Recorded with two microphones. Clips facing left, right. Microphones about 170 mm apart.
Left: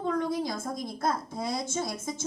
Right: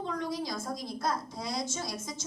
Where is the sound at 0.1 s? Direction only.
55° left (ahead or behind).